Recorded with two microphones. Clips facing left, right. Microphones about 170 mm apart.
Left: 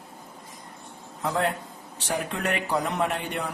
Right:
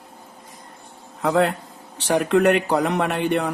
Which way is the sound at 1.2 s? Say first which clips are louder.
Right 7 dB; 75° right (ahead or behind).